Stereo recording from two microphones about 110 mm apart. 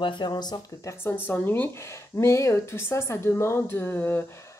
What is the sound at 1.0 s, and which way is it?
A woman's voice, 20° left (ahead or behind).